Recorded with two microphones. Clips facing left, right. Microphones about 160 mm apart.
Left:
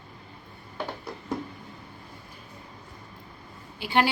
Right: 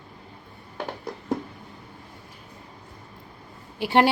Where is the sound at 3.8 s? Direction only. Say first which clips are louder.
Right 5 dB; 70° right (ahead or behind).